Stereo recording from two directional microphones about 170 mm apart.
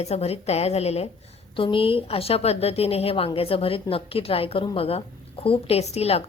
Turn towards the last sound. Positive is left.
turn(degrees=35)  # may be behind; listen again after turning